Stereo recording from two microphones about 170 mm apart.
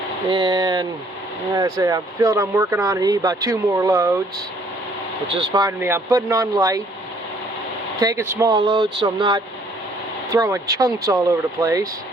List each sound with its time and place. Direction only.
0.3 s speech: 25° right (ahead or behind)
5.3 s speech: 25° right (ahead or behind)
7.9 s speech: 15° right (ahead or behind)